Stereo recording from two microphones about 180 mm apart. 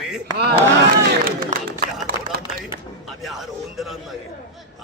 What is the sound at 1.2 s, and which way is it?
Crowd, 55° right (ahead or behind).